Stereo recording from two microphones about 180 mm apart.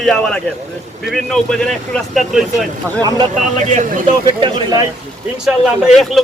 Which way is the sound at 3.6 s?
45° right (ahead or behind).